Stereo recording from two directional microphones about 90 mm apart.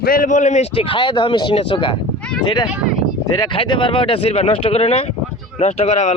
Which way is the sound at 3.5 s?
70° left (ahead or behind).